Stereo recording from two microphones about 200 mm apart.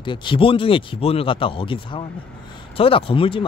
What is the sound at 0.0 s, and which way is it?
Speech, 25° left (ahead or behind).